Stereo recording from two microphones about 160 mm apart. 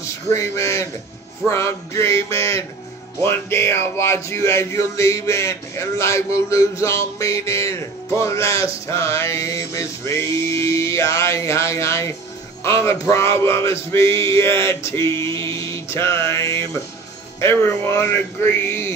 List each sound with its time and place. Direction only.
0.3 s a man's voice: 20° left (ahead or behind)
14.5 s a sound: 35° right (ahead or behind)
14.9 s speech: 15° left (ahead or behind)